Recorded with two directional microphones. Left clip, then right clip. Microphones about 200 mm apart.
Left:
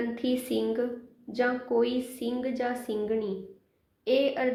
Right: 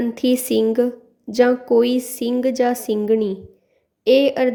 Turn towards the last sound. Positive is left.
turn(degrees=-60)  # may be behind; listen again after turning